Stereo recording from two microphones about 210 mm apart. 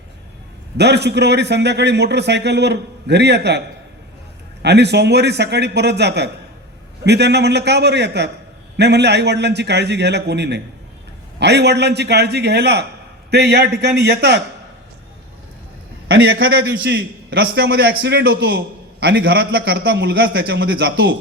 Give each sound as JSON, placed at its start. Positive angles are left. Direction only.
{"t": 0.8, "sound": "a man's voice", "side_deg": -55}
{"t": 4.6, "sound": "a man's voice", "side_deg": -55}
{"t": 16.0, "sound": "a man's voice", "side_deg": -50}